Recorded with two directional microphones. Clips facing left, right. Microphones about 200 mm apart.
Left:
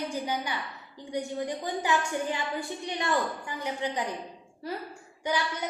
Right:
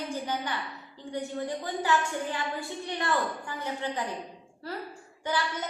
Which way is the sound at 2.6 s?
15° left (ahead or behind).